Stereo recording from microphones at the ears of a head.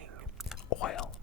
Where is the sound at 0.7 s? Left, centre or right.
Left.